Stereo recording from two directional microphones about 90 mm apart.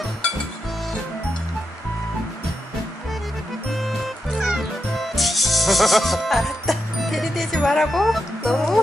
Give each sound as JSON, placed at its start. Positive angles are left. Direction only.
{"t": 3.7, "sound": "music", "side_deg": 0}